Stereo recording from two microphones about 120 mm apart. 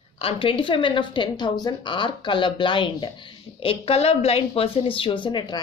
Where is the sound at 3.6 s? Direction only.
55° left (ahead or behind); by 5.6 s 35° left (ahead or behind).